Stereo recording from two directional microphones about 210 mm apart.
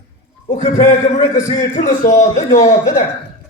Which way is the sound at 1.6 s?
35° left (ahead or behind).